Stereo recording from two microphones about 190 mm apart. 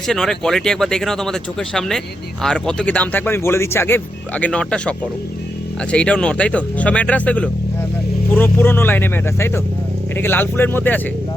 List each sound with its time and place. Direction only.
0.1 s speech: 5° left (ahead or behind)